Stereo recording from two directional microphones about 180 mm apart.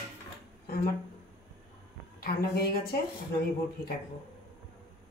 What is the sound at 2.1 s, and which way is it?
Speech, 60° left (ahead or behind).